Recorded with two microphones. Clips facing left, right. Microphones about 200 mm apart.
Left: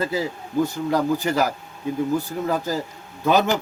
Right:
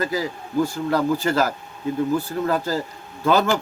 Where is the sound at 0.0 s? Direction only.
25° left (ahead or behind).